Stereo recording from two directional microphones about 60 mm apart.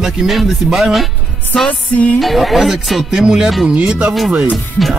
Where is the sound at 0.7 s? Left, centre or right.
Centre.